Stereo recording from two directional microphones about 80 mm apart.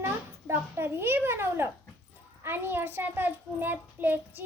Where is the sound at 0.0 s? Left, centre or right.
Right.